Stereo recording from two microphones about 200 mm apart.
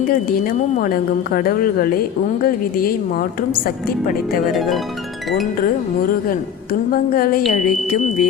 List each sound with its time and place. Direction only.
0.8 s a woman's voice: 45° left (ahead or behind)
6.9 s a woman's voice: 45° left (ahead or behind)